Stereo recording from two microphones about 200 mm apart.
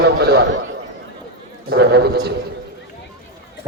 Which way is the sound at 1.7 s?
55° right (ahead or behind).